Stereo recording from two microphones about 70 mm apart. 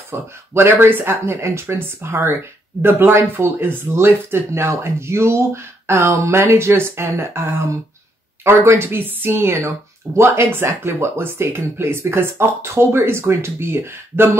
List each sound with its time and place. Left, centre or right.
0.1 s speech: right
0.7 s speech: right